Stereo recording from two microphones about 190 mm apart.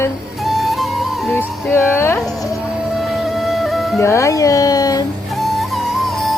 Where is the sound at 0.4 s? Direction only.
Centre (ahead or behind).